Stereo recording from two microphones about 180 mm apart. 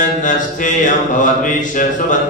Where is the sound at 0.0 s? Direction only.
45° left (ahead or behind).